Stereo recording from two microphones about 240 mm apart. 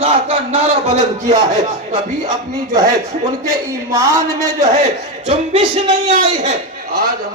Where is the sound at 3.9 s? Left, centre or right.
Centre.